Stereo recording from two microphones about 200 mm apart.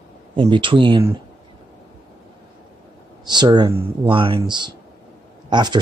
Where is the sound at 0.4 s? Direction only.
25° right (ahead or behind).